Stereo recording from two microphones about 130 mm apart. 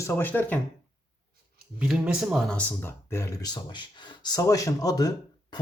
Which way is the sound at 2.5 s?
10° left (ahead or behind).